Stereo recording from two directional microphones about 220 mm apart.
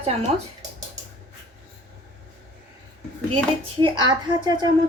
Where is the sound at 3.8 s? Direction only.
20° right (ahead or behind).